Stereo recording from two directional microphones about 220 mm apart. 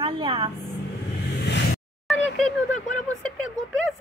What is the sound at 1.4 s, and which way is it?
Vehicle, 50° left (ahead or behind).